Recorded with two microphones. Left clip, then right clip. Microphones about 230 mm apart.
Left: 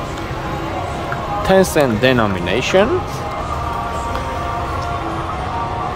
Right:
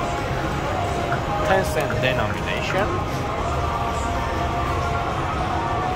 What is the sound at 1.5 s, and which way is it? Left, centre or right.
Speech, left.